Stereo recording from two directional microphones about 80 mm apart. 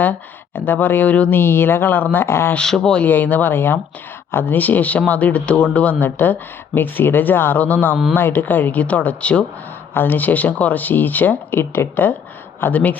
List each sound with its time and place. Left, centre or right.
0.0 s speech: left
2.6 s speech: centre
3.0 s speech: left